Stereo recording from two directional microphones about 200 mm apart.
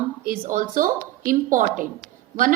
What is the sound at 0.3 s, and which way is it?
A woman's voice, 40° right (ahead or behind).